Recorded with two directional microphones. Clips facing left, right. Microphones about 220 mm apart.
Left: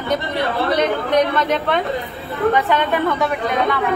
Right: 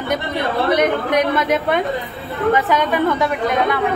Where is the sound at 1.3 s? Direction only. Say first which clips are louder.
Right 1 dB; 5° right (ahead or behind).